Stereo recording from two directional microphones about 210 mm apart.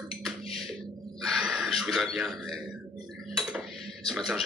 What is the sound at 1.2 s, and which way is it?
Gasp, centre (ahead or behind).